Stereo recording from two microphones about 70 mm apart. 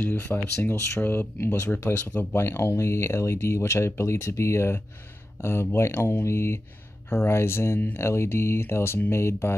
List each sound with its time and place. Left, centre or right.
0.0 s speech: left